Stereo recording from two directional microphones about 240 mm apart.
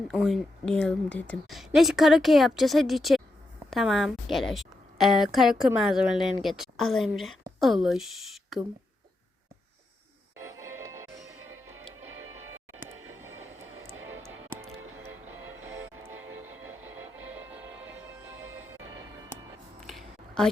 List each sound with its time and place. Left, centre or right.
0.1 s a woman's voice: centre
10.7 s music: centre
13.0 s vehicle: right
13.3 s music: right
14.7 s music: centre
19.8 s a sound: centre